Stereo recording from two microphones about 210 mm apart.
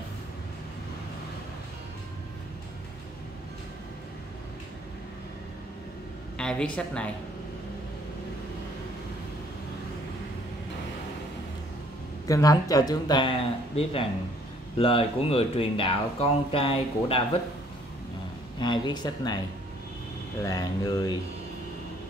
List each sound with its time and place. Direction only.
6.3 s a woman's voice: 5° left (ahead or behind)
12.3 s speech: 15° left (ahead or behind)
18.6 s speech: 20° left (ahead or behind)
20.4 s speech: 15° left (ahead or behind)